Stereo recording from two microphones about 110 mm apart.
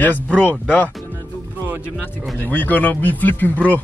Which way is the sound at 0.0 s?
15° left (ahead or behind).